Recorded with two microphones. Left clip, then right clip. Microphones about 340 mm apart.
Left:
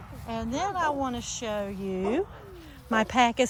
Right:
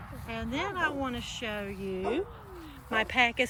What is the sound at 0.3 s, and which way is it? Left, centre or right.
A woman's voice, centre.